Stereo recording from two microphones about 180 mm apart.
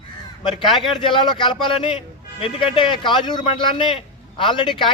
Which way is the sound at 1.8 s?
30° left (ahead or behind).